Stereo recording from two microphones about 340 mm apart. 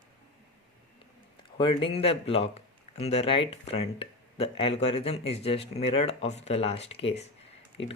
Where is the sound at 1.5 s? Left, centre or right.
Centre.